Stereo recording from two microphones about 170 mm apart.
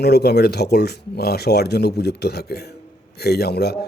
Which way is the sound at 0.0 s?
70° left (ahead or behind).